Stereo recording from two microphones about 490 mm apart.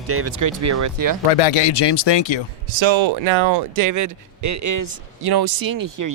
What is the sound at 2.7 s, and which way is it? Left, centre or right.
Speech, right.